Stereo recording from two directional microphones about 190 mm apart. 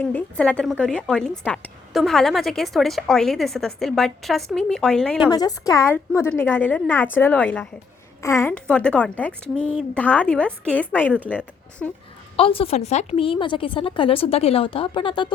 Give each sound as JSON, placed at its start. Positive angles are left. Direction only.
{"t": 0.0, "sound": "a woman's voice", "side_deg": 5}
{"t": 5.3, "sound": "a woman's voice", "side_deg": 20}
{"t": 12.4, "sound": "a woman's voice", "side_deg": 30}